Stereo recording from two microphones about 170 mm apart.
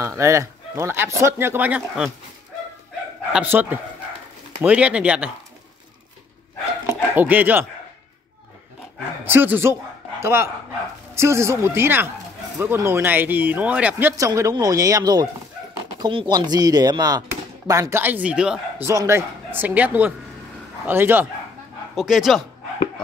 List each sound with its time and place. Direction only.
0.0 s speech: 15° right (ahead or behind)
3.3 s speech: 10° right (ahead or behind)
6.9 s speech: 10° right (ahead or behind)
9.2 s speech: 10° right (ahead or behind)
18.9 s speech: 15° right (ahead or behind)
21.9 s speech: centre (ahead or behind)